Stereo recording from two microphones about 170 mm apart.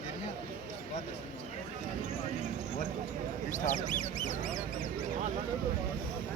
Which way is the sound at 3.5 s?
45° left (ahead or behind).